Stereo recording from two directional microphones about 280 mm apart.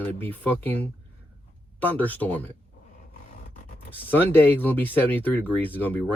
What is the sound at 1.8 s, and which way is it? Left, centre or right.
Speech, centre.